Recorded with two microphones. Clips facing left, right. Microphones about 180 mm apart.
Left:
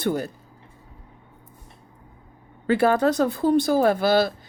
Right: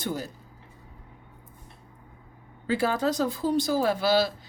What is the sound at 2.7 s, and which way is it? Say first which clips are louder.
Speech: left 6 dB; 60° left (ahead or behind).